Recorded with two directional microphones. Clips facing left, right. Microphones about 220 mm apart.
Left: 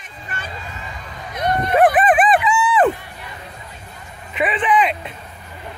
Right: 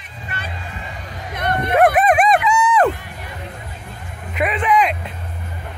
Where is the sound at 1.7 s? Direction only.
Centre (ahead or behind).